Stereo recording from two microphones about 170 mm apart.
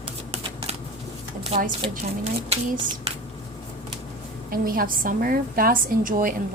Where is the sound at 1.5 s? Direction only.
35° right (ahead or behind).